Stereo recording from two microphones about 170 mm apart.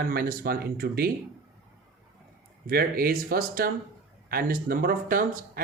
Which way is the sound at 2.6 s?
60° right (ahead or behind).